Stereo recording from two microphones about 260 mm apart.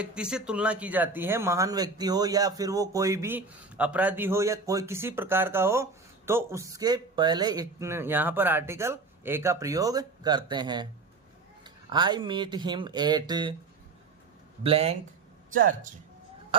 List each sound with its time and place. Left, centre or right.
0.0 s speech: centre
14.6 s speech: right